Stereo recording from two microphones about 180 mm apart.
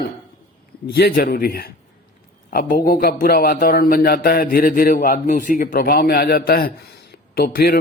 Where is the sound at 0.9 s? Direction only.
55° left (ahead or behind).